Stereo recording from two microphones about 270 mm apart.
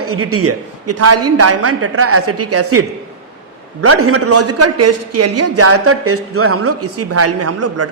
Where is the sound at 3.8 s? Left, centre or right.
Right.